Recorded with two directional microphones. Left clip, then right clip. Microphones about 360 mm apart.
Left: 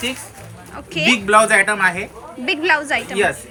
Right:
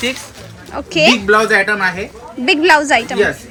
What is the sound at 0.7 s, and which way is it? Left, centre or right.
Speech, centre.